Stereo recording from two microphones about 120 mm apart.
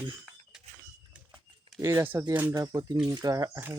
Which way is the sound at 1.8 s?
25° right (ahead or behind).